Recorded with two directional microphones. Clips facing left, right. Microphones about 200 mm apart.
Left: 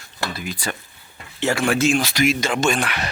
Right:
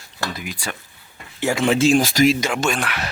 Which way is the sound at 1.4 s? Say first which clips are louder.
Right 1 dB; 20° right (ahead or behind).